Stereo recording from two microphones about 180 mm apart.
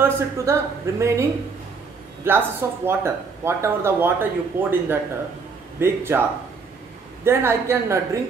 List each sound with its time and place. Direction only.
0.0 s speech: 15° right (ahead or behind)
7.2 s speech: 15° right (ahead or behind)